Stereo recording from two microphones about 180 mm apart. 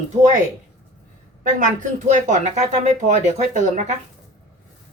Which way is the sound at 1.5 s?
45° right (ahead or behind).